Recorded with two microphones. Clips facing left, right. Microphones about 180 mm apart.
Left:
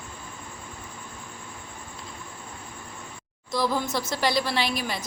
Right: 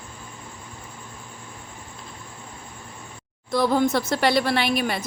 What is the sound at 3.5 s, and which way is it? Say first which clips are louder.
Speech: right 6 dB; 55° right (ahead or behind).